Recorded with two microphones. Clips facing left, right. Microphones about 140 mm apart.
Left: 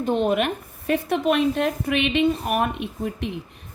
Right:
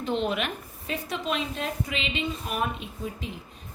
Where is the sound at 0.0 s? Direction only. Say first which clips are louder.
Left 7 dB; 50° left (ahead or behind).